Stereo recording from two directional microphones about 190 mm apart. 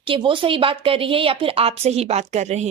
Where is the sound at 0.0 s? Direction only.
25° right (ahead or behind).